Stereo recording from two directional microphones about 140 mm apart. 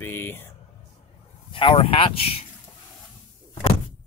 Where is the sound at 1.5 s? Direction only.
40° left (ahead or behind).